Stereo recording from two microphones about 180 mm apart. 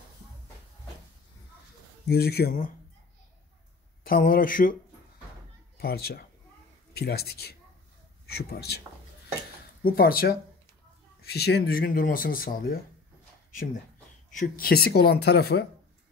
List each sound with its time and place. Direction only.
2.0 s speech: 60° left (ahead or behind)
4.0 s speech: 55° left (ahead or behind)
5.8 s speech: 60° left (ahead or behind)
9.8 s speech: 55° left (ahead or behind)
11.3 s speech: 65° left (ahead or behind)
14.3 s speech: 50° left (ahead or behind)